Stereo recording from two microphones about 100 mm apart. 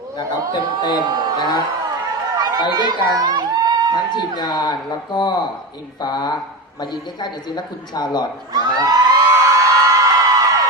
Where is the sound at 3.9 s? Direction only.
45° left (ahead or behind).